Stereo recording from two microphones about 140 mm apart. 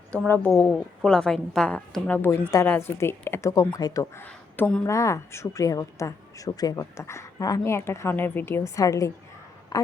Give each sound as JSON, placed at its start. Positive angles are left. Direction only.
{"t": 0.3, "sound": "a woman's voice", "side_deg": 10}